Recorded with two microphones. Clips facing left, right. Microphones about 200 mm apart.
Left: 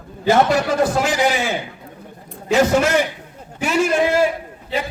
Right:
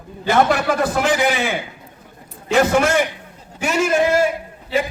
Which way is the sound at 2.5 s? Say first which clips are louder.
Even; 50° right (ahead or behind).